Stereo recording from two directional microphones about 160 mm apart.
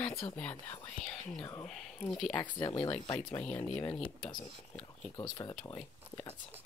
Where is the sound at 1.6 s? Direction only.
5° left (ahead or behind).